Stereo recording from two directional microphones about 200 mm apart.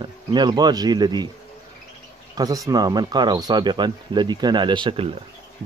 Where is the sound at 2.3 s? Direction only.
20° right (ahead or behind).